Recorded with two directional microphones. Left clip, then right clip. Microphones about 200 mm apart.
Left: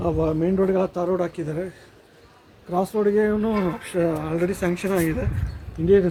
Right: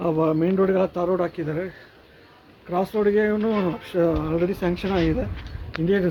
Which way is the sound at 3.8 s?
20° right (ahead or behind).